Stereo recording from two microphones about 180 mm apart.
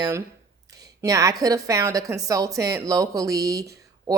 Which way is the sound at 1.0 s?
20° right (ahead or behind).